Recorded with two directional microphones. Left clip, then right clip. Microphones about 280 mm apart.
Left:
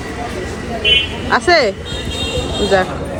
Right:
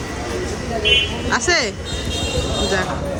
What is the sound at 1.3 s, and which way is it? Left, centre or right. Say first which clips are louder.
Speech: left 7 dB; centre.